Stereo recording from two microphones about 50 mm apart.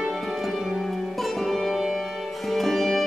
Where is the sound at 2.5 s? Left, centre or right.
Centre.